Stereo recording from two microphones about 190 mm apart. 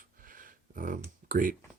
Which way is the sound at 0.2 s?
45° right (ahead or behind).